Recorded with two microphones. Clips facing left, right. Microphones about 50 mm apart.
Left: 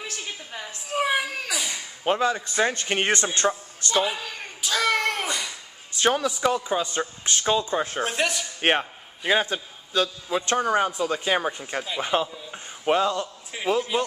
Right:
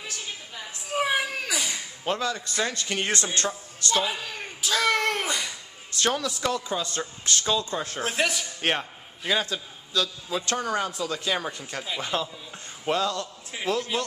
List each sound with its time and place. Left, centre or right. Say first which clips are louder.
0.8 s a sound: left 1 dB; centre
2.0 s a man's voice: left 5 dB; left
4.0 s a sound: left 2 dB; centre
5.9 s speech: left 4 dB; centre
8.0 s speech: left 1 dB; centre
8.5 s a man's voice: left 8 dB; left